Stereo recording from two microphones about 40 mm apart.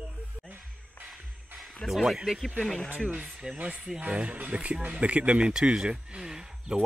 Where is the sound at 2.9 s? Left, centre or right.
Right.